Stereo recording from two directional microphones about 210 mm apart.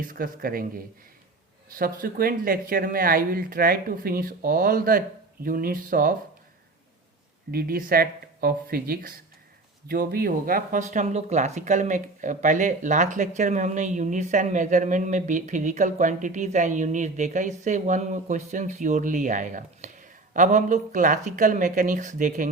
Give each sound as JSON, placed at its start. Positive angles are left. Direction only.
{"t": 0.0, "sound": "speech", "side_deg": -40}
{"t": 1.8, "sound": "speech", "side_deg": -45}
{"t": 7.5, "sound": "speech", "side_deg": -45}